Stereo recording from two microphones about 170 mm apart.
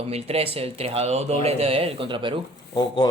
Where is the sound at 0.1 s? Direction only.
35° right (ahead or behind).